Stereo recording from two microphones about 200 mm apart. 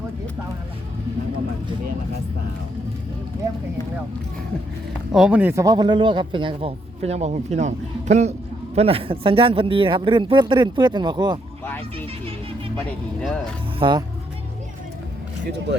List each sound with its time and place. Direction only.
5.1 s speech: 5° right (ahead or behind); by 11.3 s 20° right (ahead or behind)
11.6 s speech: 10° left (ahead or behind)
13.2 s speech: 5° left (ahead or behind)
13.7 s speech: 25° right (ahead or behind)